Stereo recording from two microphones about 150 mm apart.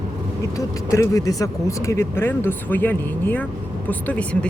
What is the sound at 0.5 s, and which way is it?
Speech, 20° left (ahead or behind).